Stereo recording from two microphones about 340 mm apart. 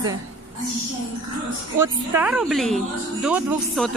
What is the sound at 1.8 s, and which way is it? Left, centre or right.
Speech, centre.